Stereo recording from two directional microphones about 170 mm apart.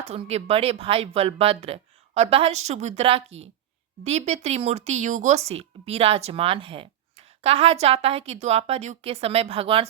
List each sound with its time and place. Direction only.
0.0 s speech: 35° right (ahead or behind)